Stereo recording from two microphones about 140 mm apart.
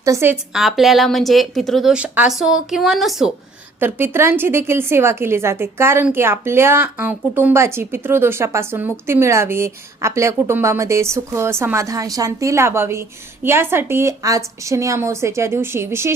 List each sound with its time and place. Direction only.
0.0 s a woman's voice: 20° right (ahead or behind)
0.5 s a woman's voice: centre (ahead or behind)
3.8 s a woman's voice: 15° right (ahead or behind)